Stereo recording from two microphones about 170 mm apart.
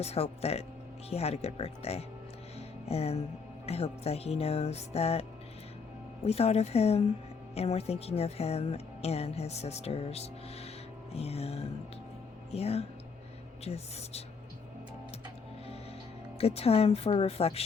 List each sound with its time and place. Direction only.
0.0 s speech: 35° left (ahead or behind)
2.6 s music: 35° left (ahead or behind)
3.7 s speech: 35° left (ahead or behind)
6.2 s speech: 35° left (ahead or behind)
16.4 s speech: 35° left (ahead or behind)